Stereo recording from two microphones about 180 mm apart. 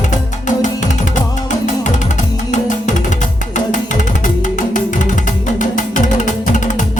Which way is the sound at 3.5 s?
45° left (ahead or behind).